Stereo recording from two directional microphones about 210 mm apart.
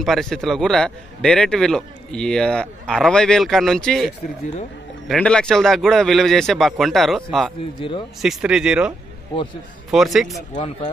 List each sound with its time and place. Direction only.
0.0 s a man's voice: centre (ahead or behind)
10.5 s speech: 30° left (ahead or behind)